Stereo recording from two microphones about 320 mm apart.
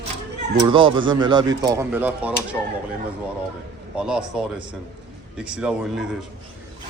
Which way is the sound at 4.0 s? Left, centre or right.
Centre.